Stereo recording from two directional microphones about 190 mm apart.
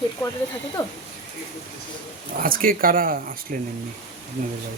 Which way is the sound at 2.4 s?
45° right (ahead or behind).